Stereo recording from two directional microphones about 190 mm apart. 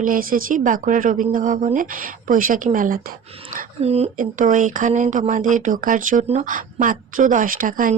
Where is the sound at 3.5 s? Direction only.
35° right (ahead or behind).